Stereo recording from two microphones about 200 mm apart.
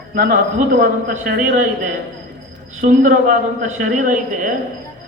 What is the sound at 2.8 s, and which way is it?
A man's voice, 40° right (ahead or behind).